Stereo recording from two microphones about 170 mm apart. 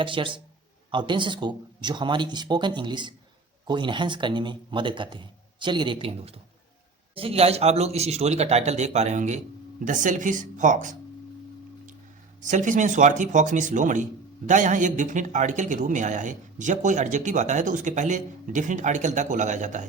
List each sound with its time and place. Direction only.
0.0 s a man's voice: 30° right (ahead or behind); by 10.9 s 45° right (ahead or behind)
12.4 s speech: 50° right (ahead or behind)